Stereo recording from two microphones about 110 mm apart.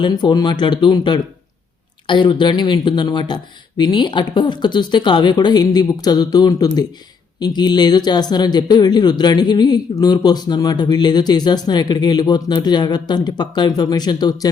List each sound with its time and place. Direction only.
0.0 s speech: 45° left (ahead or behind)